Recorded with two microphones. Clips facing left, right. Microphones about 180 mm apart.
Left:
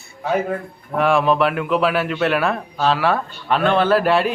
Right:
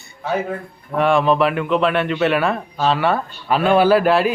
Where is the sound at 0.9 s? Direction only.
Centre (ahead or behind).